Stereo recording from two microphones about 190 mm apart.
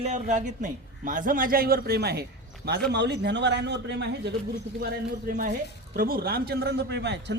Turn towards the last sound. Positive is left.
turn(degrees=-65)  # may be behind; listen again after turning